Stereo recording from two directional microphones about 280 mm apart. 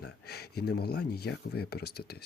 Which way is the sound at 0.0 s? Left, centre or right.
Left.